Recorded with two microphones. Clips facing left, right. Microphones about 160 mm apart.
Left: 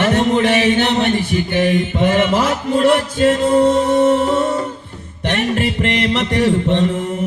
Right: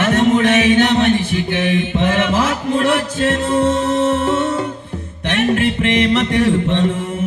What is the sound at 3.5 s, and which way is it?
Music, 40° left (ahead or behind).